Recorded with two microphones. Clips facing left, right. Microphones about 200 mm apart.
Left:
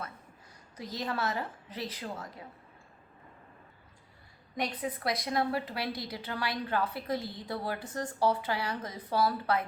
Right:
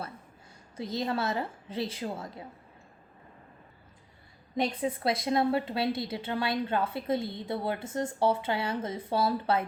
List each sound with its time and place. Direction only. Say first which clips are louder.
0.8 s a woman's voice: right 4 dB; 25° right (ahead or behind)
4.5 s a woman's voice: right 5 dB; 25° right (ahead or behind)